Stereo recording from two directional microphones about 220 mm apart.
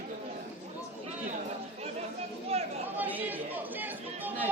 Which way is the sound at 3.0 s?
10° right (ahead or behind).